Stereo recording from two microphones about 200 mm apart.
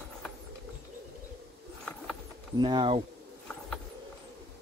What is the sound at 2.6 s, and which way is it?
Speech, 25° right (ahead or behind).